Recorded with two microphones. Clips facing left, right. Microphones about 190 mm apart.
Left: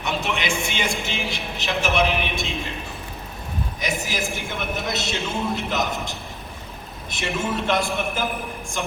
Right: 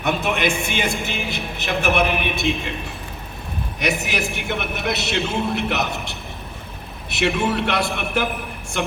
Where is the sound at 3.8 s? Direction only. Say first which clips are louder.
Right 5 dB; 65° right (ahead or behind).